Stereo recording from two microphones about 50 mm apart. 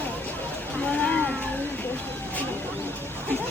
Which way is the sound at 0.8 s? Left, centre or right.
Left.